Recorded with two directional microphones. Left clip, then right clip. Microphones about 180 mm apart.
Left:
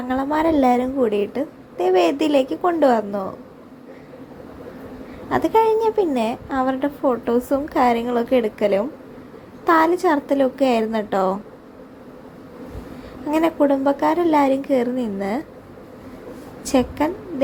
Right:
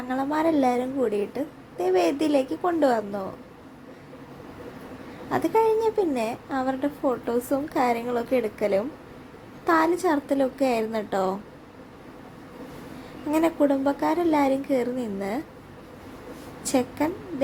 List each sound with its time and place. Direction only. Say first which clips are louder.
0.1 s a woman's voice: left 5 dB; 15° left (ahead or behind)
5.3 s a woman's voice: left 5 dB; 15° left (ahead or behind)
13.3 s a woman's voice: left 4 dB; 10° left (ahead or behind)
16.6 s a woman's voice: left 5 dB; 15° left (ahead or behind)